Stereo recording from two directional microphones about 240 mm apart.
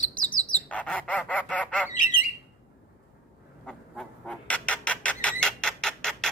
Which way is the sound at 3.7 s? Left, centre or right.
Centre.